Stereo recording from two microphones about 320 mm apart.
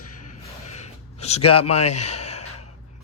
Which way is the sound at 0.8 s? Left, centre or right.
Centre.